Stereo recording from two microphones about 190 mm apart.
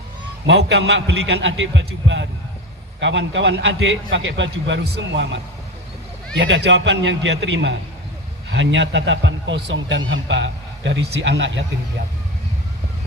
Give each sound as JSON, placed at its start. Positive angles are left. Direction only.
{"t": 0.4, "sound": "a man's voice", "side_deg": -65}
{"t": 4.1, "sound": "a man's voice", "side_deg": -75}